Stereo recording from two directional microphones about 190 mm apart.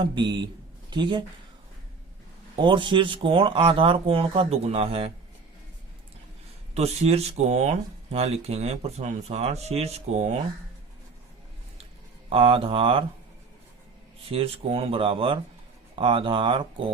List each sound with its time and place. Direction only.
0.0 s speech: 25° right (ahead or behind)
2.6 s speech: 25° right (ahead or behind)
6.7 s speech: 35° right (ahead or behind)
12.3 s speech: 30° right (ahead or behind)
14.3 s speech: 30° right (ahead or behind)